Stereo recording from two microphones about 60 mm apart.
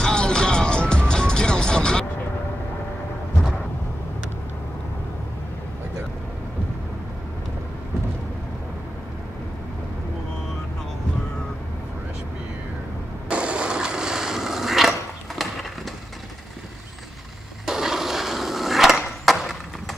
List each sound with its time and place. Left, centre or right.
0.0 s music: centre
13.3 s a sound: centre
17.6 s skateboard: centre